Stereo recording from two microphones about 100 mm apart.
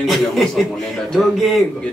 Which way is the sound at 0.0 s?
Centre (ahead or behind).